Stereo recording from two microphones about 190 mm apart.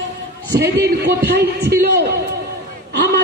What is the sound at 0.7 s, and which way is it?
Speech, 60° right (ahead or behind).